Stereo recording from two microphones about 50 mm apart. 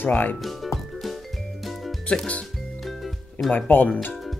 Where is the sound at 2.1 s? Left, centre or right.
Centre.